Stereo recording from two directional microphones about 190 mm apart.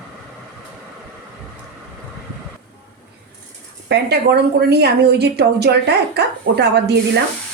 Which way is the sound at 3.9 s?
60° right (ahead or behind).